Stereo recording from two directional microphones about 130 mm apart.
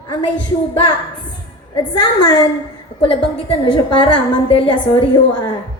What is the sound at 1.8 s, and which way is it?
A woman's voice, 40° left (ahead or behind).